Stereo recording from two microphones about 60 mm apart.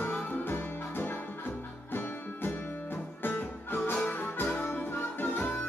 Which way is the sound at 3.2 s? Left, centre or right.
Left.